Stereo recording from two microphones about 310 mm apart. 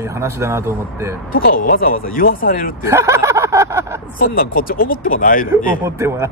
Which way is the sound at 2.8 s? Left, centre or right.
Centre.